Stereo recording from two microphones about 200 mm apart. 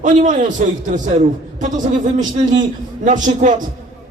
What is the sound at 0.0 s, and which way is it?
A man's voice, 40° right (ahead or behind).